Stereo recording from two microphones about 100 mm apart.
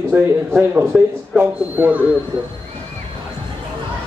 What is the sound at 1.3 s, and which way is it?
Speech, 20° right (ahead or behind).